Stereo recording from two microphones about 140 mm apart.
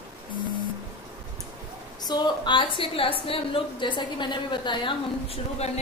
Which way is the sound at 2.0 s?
30° left (ahead or behind).